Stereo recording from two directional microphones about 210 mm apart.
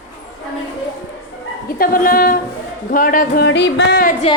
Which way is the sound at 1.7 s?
45° left (ahead or behind).